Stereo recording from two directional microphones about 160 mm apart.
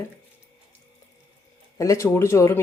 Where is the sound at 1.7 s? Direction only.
20° left (ahead or behind).